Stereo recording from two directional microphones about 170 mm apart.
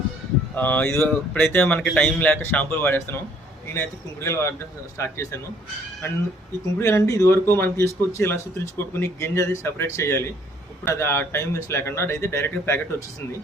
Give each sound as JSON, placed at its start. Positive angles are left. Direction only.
{"t": 0.5, "sound": "speech", "side_deg": 10}
{"t": 6.7, "sound": "speech", "side_deg": 15}